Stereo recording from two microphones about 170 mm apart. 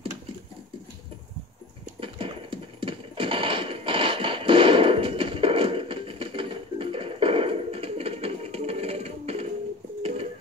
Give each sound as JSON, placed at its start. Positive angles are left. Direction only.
{"t": 2.0, "sound": "clip-clop", "side_deg": -30}